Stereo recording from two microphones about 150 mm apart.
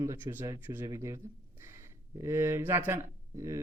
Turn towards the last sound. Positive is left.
turn(degrees=-20)  # may be behind; listen again after turning